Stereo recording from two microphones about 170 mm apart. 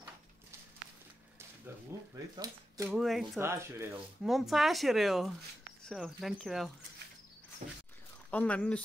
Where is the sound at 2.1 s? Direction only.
20° right (ahead or behind).